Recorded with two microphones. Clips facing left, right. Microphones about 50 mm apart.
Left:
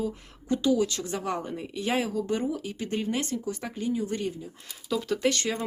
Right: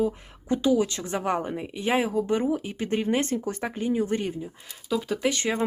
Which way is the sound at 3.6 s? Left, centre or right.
Right.